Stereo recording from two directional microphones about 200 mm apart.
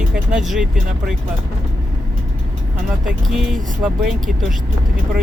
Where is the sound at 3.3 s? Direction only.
Centre (ahead or behind).